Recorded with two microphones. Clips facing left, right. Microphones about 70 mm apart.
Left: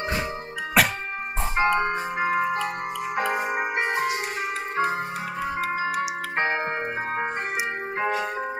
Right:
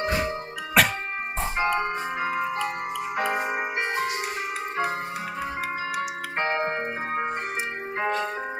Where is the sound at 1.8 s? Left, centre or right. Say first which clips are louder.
Left 3 dB; left.